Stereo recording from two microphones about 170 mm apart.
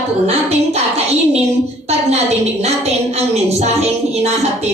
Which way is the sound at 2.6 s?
40° right (ahead or behind).